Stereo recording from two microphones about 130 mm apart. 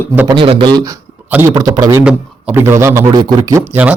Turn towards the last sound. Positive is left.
turn(degrees=-10)  # may be behind; listen again after turning